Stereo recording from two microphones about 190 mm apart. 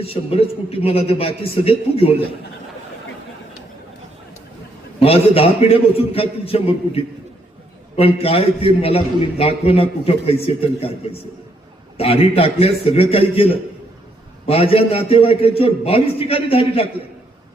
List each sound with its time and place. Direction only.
0.0 s a man's voice: 30° left (ahead or behind)
4.9 s a man's voice: 30° left (ahead or behind)
11.9 s a man's voice: 30° left (ahead or behind)